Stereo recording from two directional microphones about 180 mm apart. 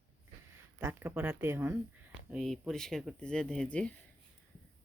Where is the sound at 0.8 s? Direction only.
10° right (ahead or behind).